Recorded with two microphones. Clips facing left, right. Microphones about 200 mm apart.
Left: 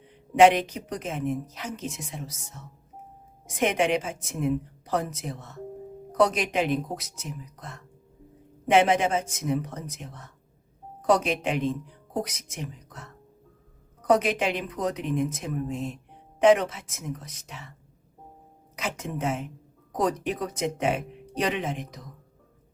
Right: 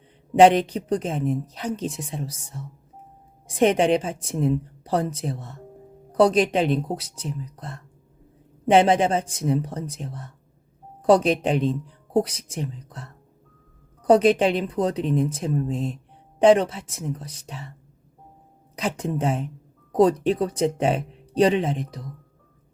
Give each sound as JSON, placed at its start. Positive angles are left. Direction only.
{"t": 0.3, "sound": "speech", "side_deg": -35}
{"t": 18.8, "sound": "speech", "side_deg": -35}